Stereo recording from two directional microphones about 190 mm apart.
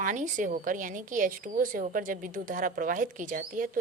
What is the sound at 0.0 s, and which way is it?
A woman's voice, 45° right (ahead or behind).